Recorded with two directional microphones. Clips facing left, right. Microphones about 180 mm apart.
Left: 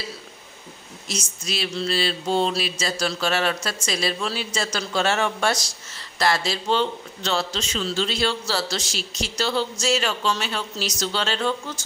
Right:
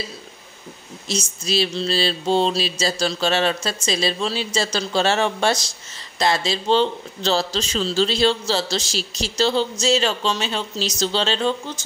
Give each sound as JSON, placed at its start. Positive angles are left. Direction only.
{"t": 1.0, "sound": "speech", "side_deg": -30}
{"t": 2.6, "sound": "a sound", "side_deg": -30}
{"t": 3.1, "sound": "speech", "side_deg": -25}